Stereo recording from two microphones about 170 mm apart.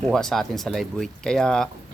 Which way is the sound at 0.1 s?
Centre (ahead or behind).